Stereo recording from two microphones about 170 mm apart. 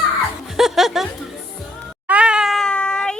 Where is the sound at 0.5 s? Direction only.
Centre (ahead or behind).